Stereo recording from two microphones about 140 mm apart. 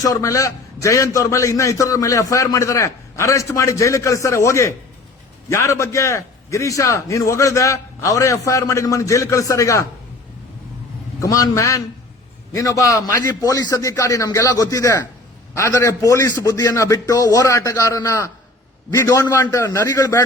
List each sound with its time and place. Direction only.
0.0 s a man's voice: 25° left (ahead or behind)
11.2 s a man's voice: 25° left (ahead or behind)
19.2 s a man's voice: 15° left (ahead or behind)